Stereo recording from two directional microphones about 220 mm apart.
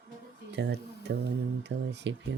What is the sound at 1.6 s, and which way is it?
Speech, 50° right (ahead or behind).